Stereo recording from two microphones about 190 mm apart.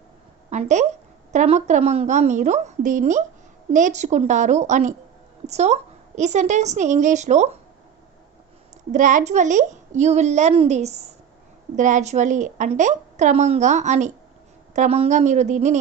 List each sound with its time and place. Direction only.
0.5 s a woman's voice: 35° right (ahead or behind)
8.9 s a woman's voice: 40° right (ahead or behind)